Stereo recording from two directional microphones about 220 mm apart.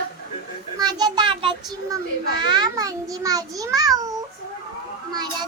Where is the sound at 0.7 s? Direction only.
20° right (ahead or behind).